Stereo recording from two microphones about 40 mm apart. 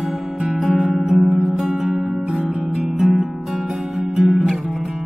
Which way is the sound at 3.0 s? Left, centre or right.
Centre.